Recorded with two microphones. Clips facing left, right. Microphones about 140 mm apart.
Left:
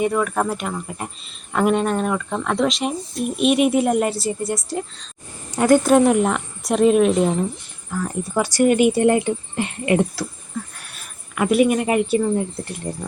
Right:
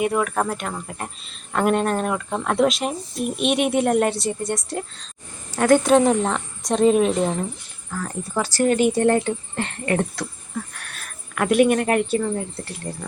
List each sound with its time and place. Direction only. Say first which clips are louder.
0.0 s speech: left 1 dB; 5° right (ahead or behind)
12.2 s speech: left 4 dB; 15° left (ahead or behind)